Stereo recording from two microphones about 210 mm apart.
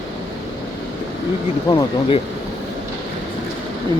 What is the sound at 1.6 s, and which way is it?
Speech, 20° left (ahead or behind).